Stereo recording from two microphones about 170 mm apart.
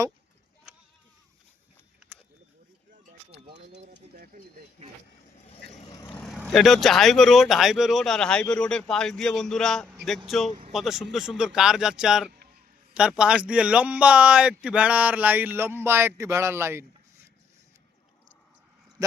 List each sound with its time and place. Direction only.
3.5 s speech: 75° right (ahead or behind)
5.9 s vehicle: 15° left (ahead or behind)
6.2 s speech: centre (ahead or behind)
19.0 s a man's voice: 20° right (ahead or behind)